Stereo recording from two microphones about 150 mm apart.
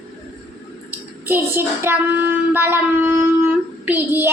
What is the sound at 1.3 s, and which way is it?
Child singing, 15° right (ahead or behind).